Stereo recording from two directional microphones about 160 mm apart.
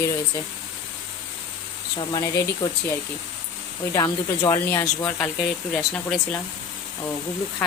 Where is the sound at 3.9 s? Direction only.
20° left (ahead or behind).